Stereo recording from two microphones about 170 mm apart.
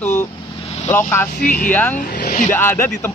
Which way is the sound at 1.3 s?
55° left (ahead or behind).